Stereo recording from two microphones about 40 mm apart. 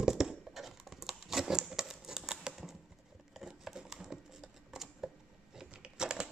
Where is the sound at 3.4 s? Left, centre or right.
Centre.